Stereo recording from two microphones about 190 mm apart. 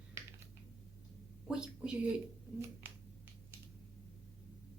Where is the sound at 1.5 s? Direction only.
5° right (ahead or behind).